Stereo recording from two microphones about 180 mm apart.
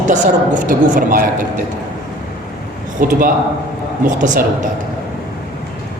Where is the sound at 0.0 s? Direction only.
45° right (ahead or behind).